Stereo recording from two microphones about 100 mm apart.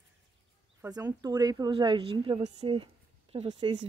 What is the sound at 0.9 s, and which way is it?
Speech, 40° right (ahead or behind).